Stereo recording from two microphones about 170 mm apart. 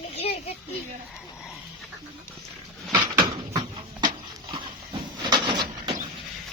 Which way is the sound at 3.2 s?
20° right (ahead or behind).